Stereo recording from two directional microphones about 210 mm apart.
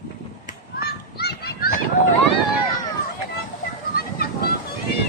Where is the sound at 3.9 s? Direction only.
45° left (ahead or behind).